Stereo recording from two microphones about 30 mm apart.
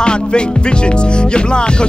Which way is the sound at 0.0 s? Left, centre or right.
Left.